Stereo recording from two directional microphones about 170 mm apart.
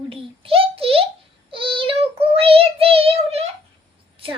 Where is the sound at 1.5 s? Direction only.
30° right (ahead or behind).